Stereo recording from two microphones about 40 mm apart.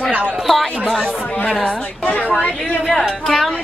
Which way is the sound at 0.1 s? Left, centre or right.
Right.